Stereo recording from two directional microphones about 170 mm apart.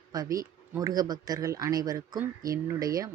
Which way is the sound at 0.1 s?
20° right (ahead or behind).